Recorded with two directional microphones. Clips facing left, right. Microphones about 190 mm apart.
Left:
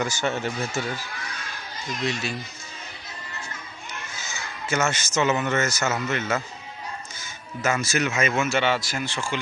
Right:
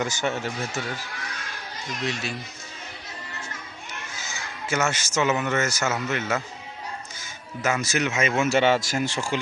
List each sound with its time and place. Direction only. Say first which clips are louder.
0.0 s speech: even; 20° right (ahead or behind)
0.4 s speech: left 2 dB; centre (ahead or behind)
4.7 s a man's voice: even; 10° right (ahead or behind)
8.4 s speech: right 6 dB; 40° right (ahead or behind)